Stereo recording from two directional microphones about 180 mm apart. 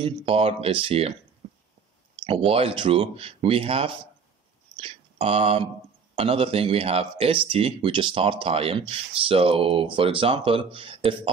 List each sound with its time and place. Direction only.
0.0 s speech: 30° right (ahead or behind)
1.4 s a sound: 30° right (ahead or behind)
2.2 s speech: 30° right (ahead or behind)